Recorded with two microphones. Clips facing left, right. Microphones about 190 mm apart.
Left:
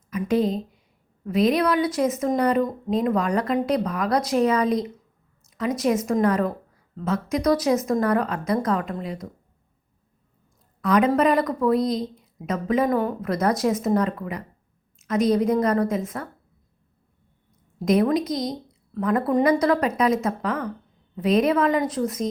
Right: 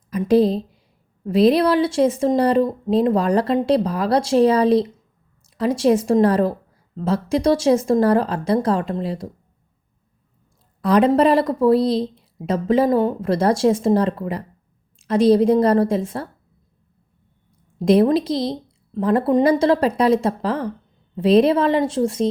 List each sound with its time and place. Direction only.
0.1 s a woman's voice: 35° right (ahead or behind)
10.8 s a woman's voice: 35° right (ahead or behind)
17.7 s a woman's voice: 30° right (ahead or behind)